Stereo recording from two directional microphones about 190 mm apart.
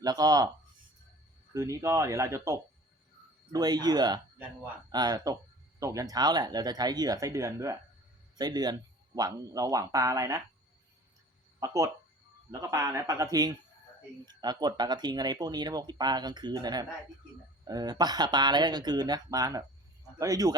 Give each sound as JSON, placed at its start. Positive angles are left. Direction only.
{"t": 0.0, "sound": "speech", "side_deg": -20}
{"t": 1.5, "sound": "speech", "side_deg": -15}
{"t": 11.6, "sound": "speech", "side_deg": -15}